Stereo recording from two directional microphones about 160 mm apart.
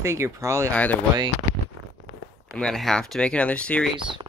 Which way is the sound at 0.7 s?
10° left (ahead or behind).